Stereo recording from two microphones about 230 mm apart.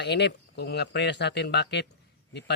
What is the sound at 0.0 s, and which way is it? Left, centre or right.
Speech, left.